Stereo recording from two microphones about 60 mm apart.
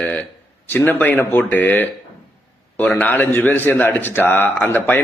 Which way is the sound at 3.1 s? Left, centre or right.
Left.